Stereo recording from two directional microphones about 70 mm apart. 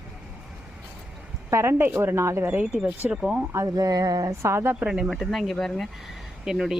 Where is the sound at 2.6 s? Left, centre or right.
Centre.